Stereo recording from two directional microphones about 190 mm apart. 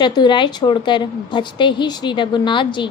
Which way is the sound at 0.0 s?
25° left (ahead or behind).